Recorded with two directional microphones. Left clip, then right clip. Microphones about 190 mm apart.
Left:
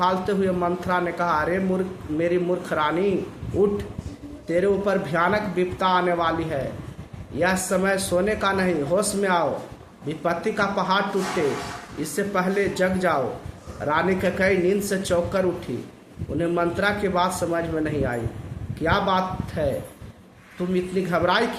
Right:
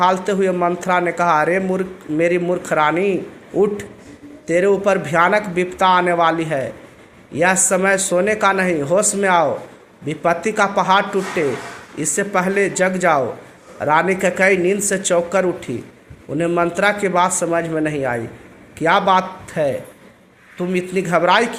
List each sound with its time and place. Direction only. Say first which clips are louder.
0.0 s a man's voice: right 6 dB; 35° right (ahead or behind)
4.4 s a man's voice: right 6 dB; 35° right (ahead or behind)
12.1 s a man's voice: right 6 dB; 35° right (ahead or behind)